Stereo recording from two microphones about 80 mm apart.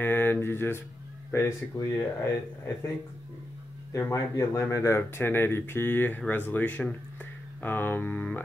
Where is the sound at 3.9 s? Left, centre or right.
Left.